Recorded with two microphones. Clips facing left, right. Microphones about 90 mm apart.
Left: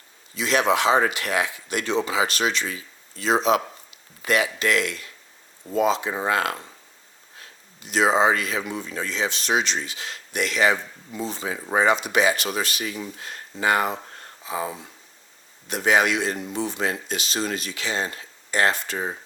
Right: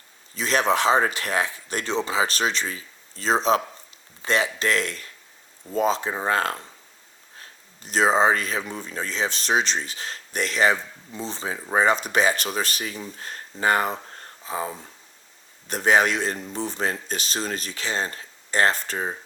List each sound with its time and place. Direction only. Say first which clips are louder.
0.3 s speech: left 1 dB; 40° right (ahead or behind)